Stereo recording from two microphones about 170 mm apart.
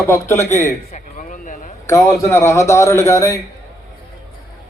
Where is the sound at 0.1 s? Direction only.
15° left (ahead or behind).